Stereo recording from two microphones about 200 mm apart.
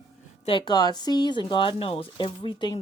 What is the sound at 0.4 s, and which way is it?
Speech, 25° left (ahead or behind).